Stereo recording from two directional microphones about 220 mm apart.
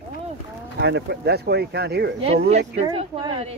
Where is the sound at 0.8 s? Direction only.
50° right (ahead or behind).